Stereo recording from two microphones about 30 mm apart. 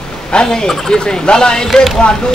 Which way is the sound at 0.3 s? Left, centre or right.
Left.